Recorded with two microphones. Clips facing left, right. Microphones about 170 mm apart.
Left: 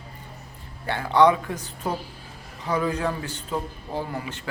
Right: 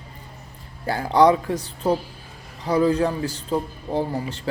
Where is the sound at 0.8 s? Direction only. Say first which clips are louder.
Right 2 dB; 35° right (ahead or behind).